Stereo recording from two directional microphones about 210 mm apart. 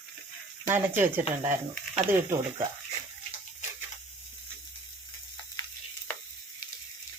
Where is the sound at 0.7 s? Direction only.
10° right (ahead or behind).